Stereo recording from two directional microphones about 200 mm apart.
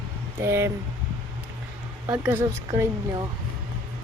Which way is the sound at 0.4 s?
15° right (ahead or behind).